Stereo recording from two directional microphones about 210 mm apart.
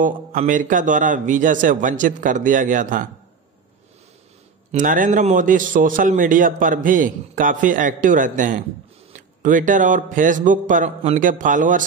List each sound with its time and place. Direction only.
0.0 s a man's voice: 40° right (ahead or behind)
4.7 s a man's voice: 40° right (ahead or behind)